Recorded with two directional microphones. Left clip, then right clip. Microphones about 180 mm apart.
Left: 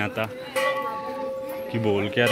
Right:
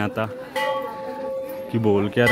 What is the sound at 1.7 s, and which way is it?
Speech, 50° right (ahead or behind).